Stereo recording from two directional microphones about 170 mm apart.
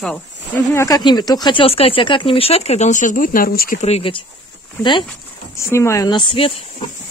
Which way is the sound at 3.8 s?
35° left (ahead or behind).